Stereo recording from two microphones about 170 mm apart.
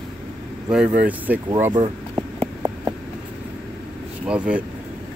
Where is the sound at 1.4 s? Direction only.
20° right (ahead or behind).